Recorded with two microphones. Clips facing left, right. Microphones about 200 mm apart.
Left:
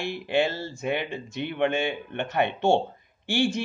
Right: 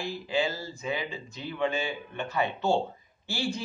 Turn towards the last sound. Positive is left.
turn(degrees=80)